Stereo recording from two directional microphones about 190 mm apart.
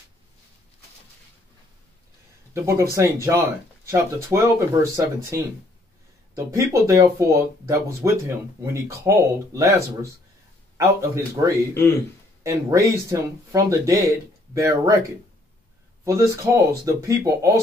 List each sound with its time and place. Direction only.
2.5 s speech: 15° right (ahead or behind)
10.8 s speech: 15° right (ahead or behind)
16.0 s speech: 15° right (ahead or behind)